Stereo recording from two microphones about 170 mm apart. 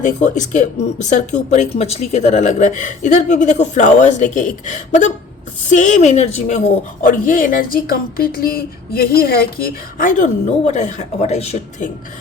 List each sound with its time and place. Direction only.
0.0 s speech: 45° left (ahead or behind)
7.0 s speech: 55° left (ahead or behind); by 11.9 s 40° left (ahead or behind)